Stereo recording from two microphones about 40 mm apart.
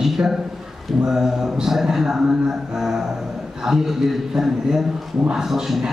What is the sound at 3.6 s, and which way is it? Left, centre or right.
A man's voice, centre.